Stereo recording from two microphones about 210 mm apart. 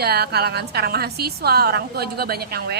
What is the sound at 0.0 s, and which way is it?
A woman's voice, 50° right (ahead or behind).